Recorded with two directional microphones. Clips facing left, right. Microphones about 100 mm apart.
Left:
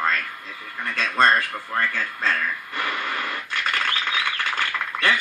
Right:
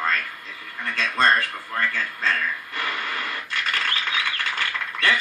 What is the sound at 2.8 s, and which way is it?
Radio, 20° left (ahead or behind).